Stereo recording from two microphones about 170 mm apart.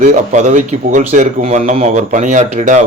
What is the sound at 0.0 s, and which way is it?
Speech, 45° right (ahead or behind).